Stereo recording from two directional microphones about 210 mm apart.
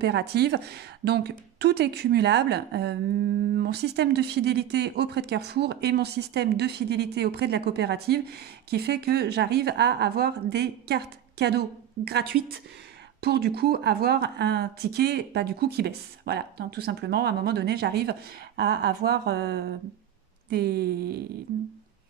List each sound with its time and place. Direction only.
0.0 s speech: 50° right (ahead or behind)